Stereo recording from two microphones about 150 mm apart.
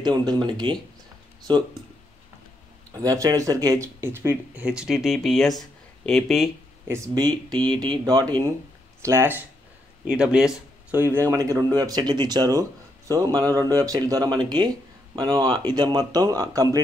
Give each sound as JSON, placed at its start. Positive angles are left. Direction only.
{"t": 0.0, "sound": "speech", "side_deg": -30}
{"t": 2.9, "sound": "speech", "side_deg": -25}
{"t": 6.9, "sound": "speech", "side_deg": -25}
{"t": 9.0, "sound": "speech", "side_deg": -15}
{"t": 10.0, "sound": "speech", "side_deg": -5}